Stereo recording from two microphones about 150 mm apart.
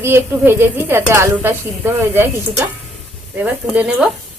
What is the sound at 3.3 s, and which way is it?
Speech, 10° right (ahead or behind).